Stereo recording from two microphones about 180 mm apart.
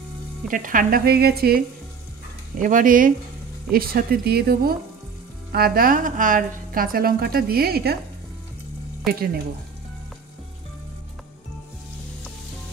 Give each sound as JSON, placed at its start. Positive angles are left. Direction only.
{"t": 0.5, "sound": "a woman's voice", "side_deg": -50}
{"t": 2.6, "sound": "a woman's voice", "side_deg": -50}
{"t": 9.0, "sound": "a woman's voice", "side_deg": -55}